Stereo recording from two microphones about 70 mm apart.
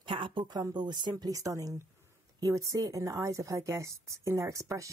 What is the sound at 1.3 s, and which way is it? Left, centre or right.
A woman's voice, right.